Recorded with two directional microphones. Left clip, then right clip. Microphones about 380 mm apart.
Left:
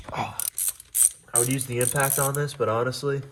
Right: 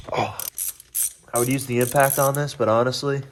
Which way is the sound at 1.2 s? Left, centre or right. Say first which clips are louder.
Right 4 dB; right.